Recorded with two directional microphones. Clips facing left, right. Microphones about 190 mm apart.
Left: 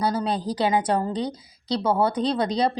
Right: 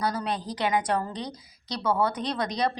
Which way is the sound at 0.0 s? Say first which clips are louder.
Left 5 dB; 30° left (ahead or behind).